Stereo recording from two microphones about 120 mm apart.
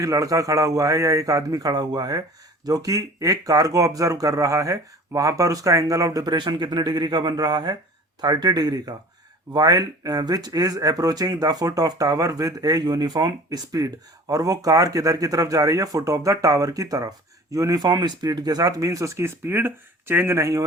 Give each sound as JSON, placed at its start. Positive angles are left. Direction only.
{"t": 0.0, "sound": "speech", "side_deg": -25}